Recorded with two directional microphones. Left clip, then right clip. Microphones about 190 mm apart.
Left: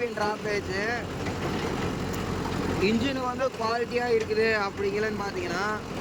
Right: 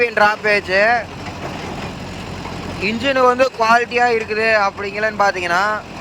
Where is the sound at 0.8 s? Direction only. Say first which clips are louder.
Right 15 dB; 5° left (ahead or behind).